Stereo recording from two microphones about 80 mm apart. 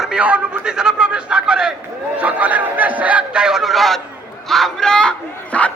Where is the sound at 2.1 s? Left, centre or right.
Centre.